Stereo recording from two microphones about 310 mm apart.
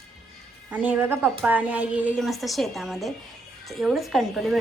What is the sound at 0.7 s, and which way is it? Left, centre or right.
A woman's voice, centre.